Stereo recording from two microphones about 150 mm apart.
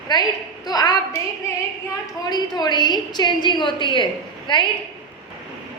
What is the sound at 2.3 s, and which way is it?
A woman's voice, 30° left (ahead or behind).